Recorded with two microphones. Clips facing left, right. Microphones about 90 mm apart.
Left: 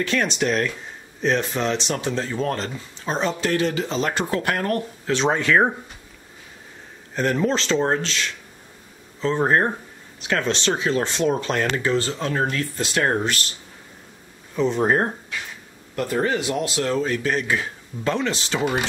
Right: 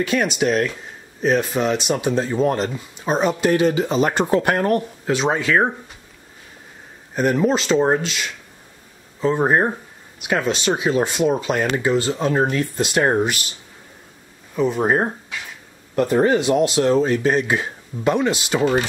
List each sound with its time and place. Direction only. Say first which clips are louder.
0.0 s speech: right 3 dB; 10° right (ahead or behind)
5.1 s speech: right 1 dB; 5° right (ahead or behind)
7.2 s speech: right 3 dB; 10° right (ahead or behind)
14.5 s speech: right 1 dB; 5° right (ahead or behind)
16.0 s speech: right 6 dB; 25° right (ahead or behind)